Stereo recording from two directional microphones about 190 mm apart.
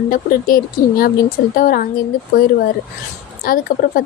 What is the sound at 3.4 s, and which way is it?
Speech, 50° left (ahead or behind).